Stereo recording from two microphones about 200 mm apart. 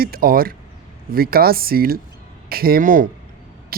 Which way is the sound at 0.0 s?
45° right (ahead or behind).